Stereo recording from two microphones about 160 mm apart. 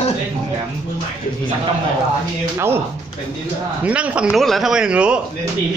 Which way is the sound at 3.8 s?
10° right (ahead or behind).